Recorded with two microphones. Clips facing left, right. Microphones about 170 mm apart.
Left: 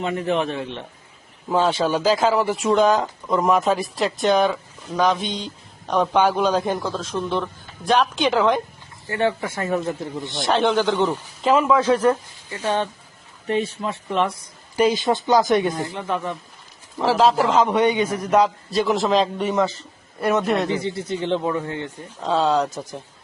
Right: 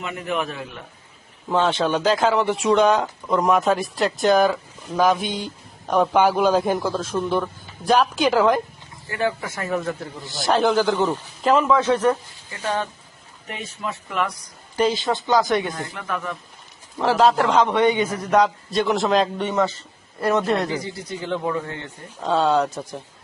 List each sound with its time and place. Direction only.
0.0 s a man's voice: 30° left (ahead or behind)
1.5 s a man's voice: 5° left (ahead or behind)
9.0 s a man's voice: 30° left (ahead or behind)
10.3 s speech: centre (ahead or behind)
11.4 s a man's voice: 5° left (ahead or behind)
13.5 s a man's voice: 30° left (ahead or behind)
17.0 s speech: centre (ahead or behind)
20.7 s a man's voice: 25° left (ahead or behind)
22.2 s speech: centre (ahead or behind)